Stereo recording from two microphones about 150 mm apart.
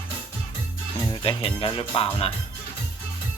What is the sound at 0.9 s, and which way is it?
Speech, 35° left (ahead or behind).